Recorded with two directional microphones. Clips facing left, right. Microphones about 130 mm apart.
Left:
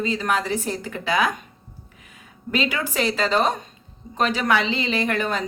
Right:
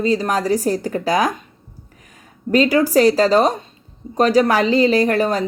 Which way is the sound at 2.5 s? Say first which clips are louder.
Right 10 dB; 40° right (ahead or behind).